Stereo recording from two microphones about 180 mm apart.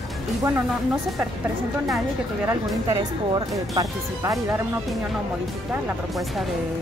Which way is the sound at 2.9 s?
20° right (ahead or behind).